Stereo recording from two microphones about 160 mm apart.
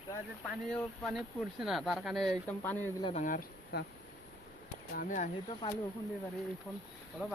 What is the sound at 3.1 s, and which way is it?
Speech, 55° left (ahead or behind).